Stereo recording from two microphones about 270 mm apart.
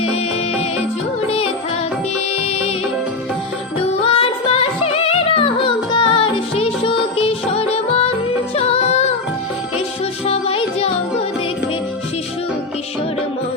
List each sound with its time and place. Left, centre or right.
0.0 s music: left
2.4 s music: left
3.8 s music: left
10.2 s music: left